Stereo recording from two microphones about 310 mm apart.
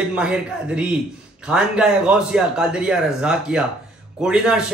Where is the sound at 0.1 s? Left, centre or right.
Centre.